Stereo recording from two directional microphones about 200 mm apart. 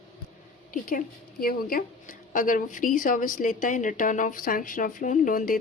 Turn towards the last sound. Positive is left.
turn(degrees=40)  # may be behind; listen again after turning